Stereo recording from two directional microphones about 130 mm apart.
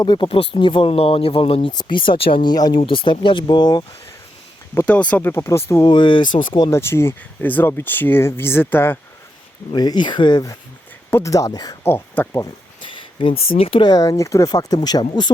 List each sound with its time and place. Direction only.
0.0 s speech: 35° left (ahead or behind)
0.3 s speech: 50° left (ahead or behind)
1.7 s speech: 35° left (ahead or behind)
2.8 s speech: 45° left (ahead or behind)
4.7 s speech: 15° left (ahead or behind)
5.8 s speech: 35° left (ahead or behind)
6.7 s speech: 20° left (ahead or behind)
9.7 s speech: 30° left (ahead or behind)
11.8 s speech: 15° left (ahead or behind)
12.8 s a sound: 40° left (ahead or behind)
13.6 s speech: 45° left (ahead or behind)